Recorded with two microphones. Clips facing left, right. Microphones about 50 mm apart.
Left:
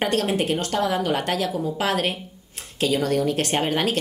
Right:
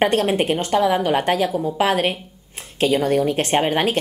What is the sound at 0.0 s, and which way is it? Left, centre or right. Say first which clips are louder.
Speech: right 4 dB; right.